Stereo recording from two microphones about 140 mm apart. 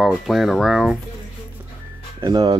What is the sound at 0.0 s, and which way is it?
Speech, centre (ahead or behind).